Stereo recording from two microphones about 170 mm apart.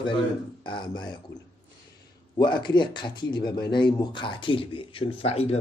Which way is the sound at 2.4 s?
25° left (ahead or behind).